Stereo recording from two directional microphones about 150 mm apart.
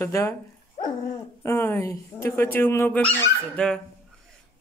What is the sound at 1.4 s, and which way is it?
Speech, 15° left (ahead or behind).